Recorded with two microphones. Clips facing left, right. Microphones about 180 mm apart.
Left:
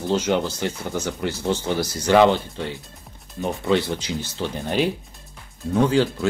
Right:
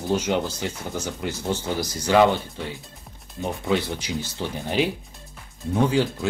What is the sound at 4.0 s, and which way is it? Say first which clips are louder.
Speech: left 1 dB; 15° right (ahead or behind).